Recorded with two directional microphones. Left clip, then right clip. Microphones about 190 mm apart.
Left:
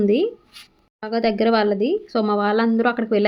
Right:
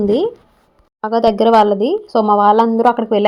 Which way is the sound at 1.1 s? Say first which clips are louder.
Right 8 dB; 15° right (ahead or behind).